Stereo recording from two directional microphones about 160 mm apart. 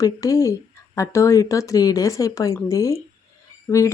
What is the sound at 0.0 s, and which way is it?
A woman's voice, 20° left (ahead or behind).